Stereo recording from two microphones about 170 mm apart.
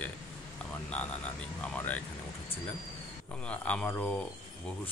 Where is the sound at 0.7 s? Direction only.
5° left (ahead or behind).